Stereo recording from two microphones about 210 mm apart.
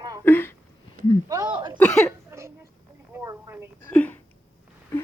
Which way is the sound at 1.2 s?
15° right (ahead or behind).